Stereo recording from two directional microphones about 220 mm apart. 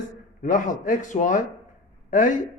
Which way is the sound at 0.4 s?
35° left (ahead or behind).